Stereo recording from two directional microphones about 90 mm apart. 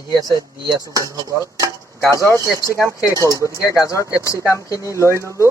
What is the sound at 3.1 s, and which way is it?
Dishes, 40° right (ahead or behind).